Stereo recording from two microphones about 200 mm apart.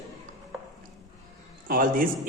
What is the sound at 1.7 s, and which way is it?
Speech, 45° right (ahead or behind).